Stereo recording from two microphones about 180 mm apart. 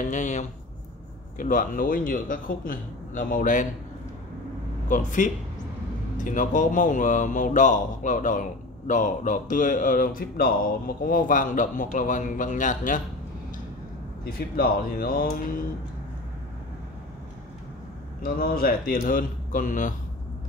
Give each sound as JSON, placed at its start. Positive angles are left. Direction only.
{"t": 0.1, "sound": "speech", "side_deg": 40}
{"t": 4.8, "sound": "speech", "side_deg": 45}
{"t": 14.6, "sound": "speech", "side_deg": 55}
{"t": 18.2, "sound": "speech", "side_deg": 55}